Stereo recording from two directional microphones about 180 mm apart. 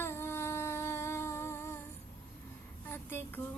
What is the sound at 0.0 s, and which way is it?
Humming, 15° left (ahead or behind).